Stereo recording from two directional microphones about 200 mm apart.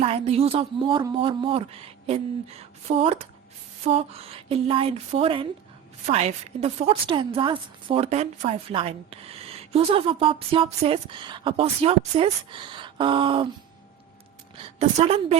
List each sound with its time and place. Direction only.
0.0 s a woman's voice: 30° right (ahead or behind)
14.8 s a woman's voice: 30° right (ahead or behind)